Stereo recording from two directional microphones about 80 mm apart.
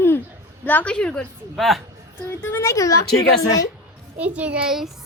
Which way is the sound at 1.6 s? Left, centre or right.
Centre.